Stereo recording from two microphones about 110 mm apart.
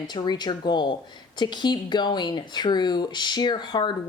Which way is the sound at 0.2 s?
40° left (ahead or behind).